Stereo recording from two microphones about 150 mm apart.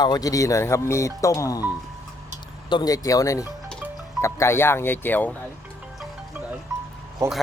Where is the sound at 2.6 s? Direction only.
30° left (ahead or behind); by 5.3 s 15° left (ahead or behind).